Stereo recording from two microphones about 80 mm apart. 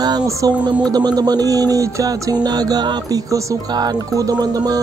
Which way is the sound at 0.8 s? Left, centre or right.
Right.